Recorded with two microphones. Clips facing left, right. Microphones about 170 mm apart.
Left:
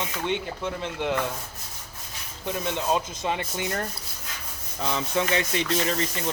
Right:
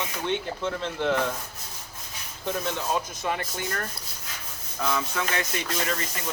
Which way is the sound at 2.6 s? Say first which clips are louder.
Left 5 dB; 20° left (ahead or behind).